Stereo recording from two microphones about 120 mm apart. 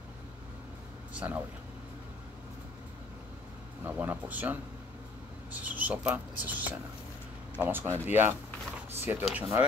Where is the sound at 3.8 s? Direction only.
15° right (ahead or behind).